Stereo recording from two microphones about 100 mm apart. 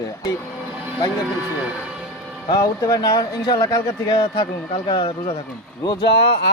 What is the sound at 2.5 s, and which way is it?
Speech, 35° left (ahead or behind).